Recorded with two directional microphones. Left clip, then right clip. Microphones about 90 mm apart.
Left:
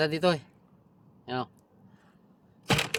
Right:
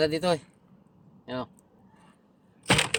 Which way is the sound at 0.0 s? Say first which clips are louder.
Right 1 dB; 55° left (ahead or behind).